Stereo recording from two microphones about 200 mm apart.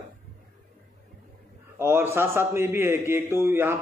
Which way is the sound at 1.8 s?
10° right (ahead or behind).